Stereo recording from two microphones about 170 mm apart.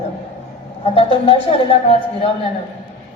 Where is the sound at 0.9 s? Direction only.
30° left (ahead or behind).